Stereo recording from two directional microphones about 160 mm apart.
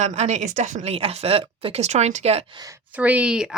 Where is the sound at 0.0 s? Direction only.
45° right (ahead or behind).